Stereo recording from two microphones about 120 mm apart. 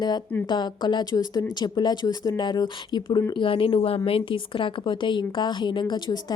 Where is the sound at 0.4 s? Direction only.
35° left (ahead or behind).